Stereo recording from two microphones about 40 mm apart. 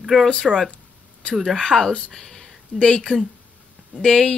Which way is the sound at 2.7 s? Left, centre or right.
Centre.